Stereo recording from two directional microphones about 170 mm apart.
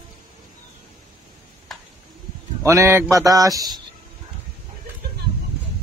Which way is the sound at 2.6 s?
15° right (ahead or behind).